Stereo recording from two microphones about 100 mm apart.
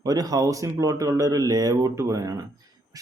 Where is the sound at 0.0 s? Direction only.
40° right (ahead or behind).